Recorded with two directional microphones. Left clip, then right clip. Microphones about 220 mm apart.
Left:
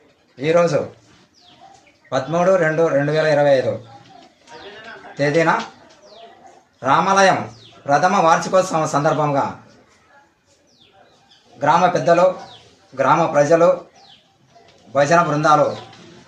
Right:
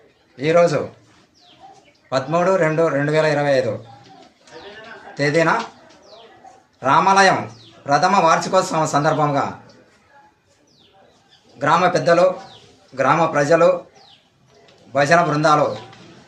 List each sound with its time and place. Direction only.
0.3 s speech: 5° right (ahead or behind)
2.3 s speech: 5° right (ahead or behind)
5.1 s speech: 5° right (ahead or behind)
6.7 s speech: 5° right (ahead or behind)
11.6 s speech: 10° right (ahead or behind)
14.9 s speech: 10° right (ahead or behind)